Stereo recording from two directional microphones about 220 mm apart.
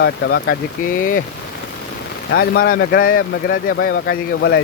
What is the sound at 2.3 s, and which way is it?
Speech, 45° left (ahead or behind).